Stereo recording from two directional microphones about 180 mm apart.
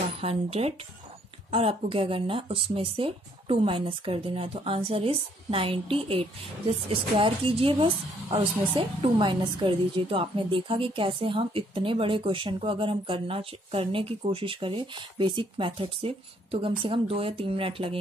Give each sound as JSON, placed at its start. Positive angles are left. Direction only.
{"t": 0.2, "sound": "a woman's voice", "side_deg": -35}